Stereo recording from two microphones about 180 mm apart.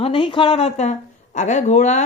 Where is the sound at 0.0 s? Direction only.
30° left (ahead or behind).